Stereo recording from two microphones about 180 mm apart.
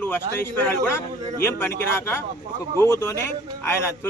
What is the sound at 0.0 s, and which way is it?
A man's voice, 10° left (ahead or behind).